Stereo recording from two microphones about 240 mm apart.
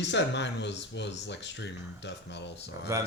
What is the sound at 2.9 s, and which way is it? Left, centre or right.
Speech, centre.